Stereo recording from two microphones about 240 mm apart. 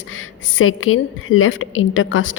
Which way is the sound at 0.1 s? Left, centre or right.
Left.